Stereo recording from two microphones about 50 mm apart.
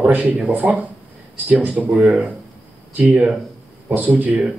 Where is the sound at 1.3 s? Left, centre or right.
Right.